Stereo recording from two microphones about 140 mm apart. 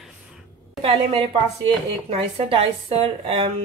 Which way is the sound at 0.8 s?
45° right (ahead or behind).